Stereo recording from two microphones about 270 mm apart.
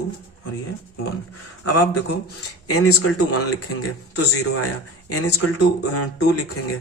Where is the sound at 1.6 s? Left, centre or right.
Left.